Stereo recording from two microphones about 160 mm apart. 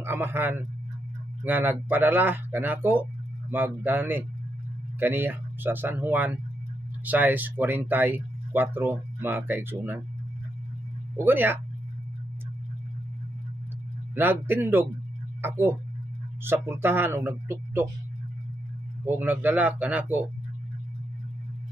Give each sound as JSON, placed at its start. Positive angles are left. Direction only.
{"t": 0.0, "sound": "speech", "side_deg": -15}
{"t": 11.1, "sound": "speech", "side_deg": -10}
{"t": 14.1, "sound": "speech", "side_deg": -15}
{"t": 19.0, "sound": "speech", "side_deg": -10}